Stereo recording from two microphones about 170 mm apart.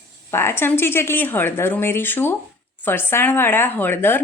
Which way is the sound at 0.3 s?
15° left (ahead or behind).